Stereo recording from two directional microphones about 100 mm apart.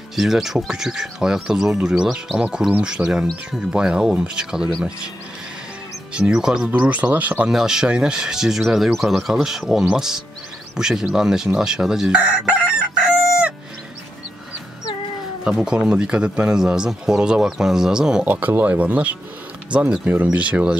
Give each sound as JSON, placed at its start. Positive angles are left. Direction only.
{"t": 0.1, "sound": "speech", "side_deg": -5}
{"t": 6.1, "sound": "speech", "side_deg": -10}
{"t": 10.8, "sound": "chicken", "side_deg": -5}
{"t": 15.4, "sound": "speech", "side_deg": -5}